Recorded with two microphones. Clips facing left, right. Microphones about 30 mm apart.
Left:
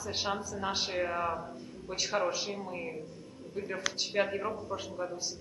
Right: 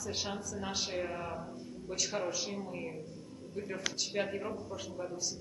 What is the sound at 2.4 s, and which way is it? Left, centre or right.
A man's voice, left.